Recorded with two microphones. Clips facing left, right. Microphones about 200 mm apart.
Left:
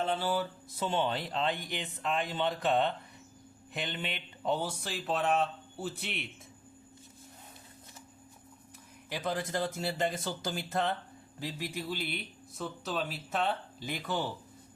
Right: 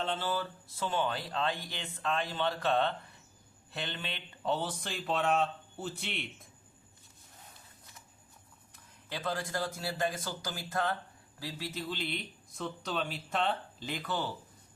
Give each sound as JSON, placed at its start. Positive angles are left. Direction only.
{"t": 0.1, "sound": "a man's voice", "side_deg": 10}
{"t": 0.9, "sound": "a man's voice", "side_deg": 25}
{"t": 9.0, "sound": "a man's voice", "side_deg": 15}